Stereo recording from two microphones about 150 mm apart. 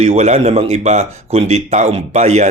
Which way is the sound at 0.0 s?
50° right (ahead or behind).